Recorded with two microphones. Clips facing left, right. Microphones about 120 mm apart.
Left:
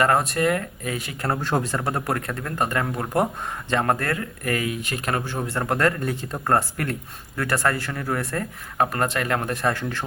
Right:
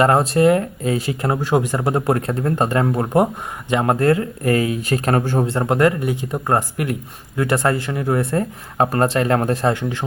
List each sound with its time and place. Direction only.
0.0 s speech: 25° right (ahead or behind)
1.2 s speech: 15° right (ahead or behind); by 5.5 s 45° right (ahead or behind)
5.5 s speech: 20° right (ahead or behind)
9.6 s speech: 15° right (ahead or behind)